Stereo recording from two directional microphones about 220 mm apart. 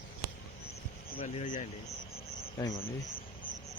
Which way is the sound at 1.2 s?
30° left (ahead or behind).